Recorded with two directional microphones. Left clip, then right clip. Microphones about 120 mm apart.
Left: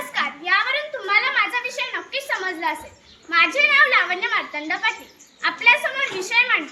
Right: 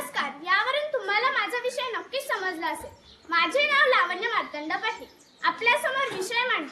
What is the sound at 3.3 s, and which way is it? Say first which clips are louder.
A child's voice: left 6 dB; 35° right (ahead or behind).